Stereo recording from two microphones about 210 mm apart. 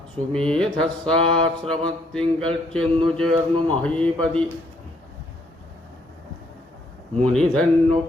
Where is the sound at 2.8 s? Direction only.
25° right (ahead or behind).